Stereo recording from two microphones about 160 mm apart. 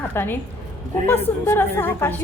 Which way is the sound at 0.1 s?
15° left (ahead or behind).